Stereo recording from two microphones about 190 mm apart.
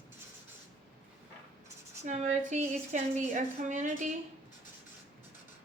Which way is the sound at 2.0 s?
40° right (ahead or behind).